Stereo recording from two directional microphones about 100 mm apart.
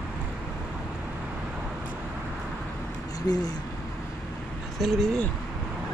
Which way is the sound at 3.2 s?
40° left (ahead or behind).